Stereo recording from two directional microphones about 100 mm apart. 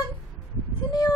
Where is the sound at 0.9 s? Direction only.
40° left (ahead or behind).